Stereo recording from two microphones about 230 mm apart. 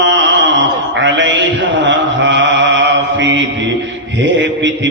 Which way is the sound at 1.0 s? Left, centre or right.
Right.